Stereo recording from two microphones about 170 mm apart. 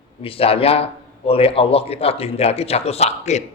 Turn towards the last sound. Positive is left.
turn(degrees=40)  # may be behind; listen again after turning